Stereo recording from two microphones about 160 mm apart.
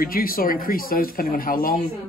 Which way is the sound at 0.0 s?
65° left (ahead or behind).